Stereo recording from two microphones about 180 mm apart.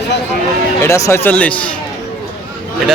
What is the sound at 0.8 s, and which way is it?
Speech, 15° left (ahead or behind).